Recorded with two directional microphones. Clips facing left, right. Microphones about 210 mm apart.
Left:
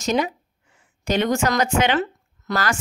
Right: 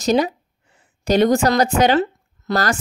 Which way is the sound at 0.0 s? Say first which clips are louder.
Right 5 dB; 35° right (ahead or behind).